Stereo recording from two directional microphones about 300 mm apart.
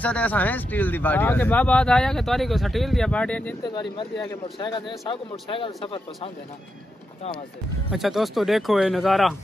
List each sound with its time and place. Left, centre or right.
0.0 s speech: centre
7.9 s speech: centre